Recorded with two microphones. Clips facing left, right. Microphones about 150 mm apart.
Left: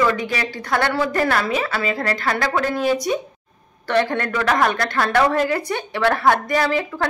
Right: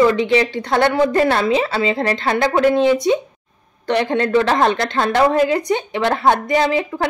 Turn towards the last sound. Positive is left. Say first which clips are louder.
# right 3 dB
turn(degrees=-20)  # may be behind; listen again after turning